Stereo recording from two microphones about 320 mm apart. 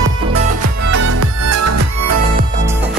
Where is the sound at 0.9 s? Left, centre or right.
Right.